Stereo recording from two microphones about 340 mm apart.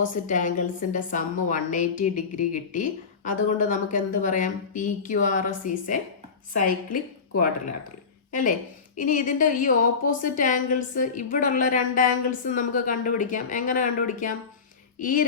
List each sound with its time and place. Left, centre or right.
0.0 s a woman's voice: left
9.0 s a woman's voice: left